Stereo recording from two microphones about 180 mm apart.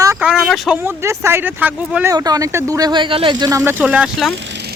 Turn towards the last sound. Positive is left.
turn(degrees=-5)  # may be behind; listen again after turning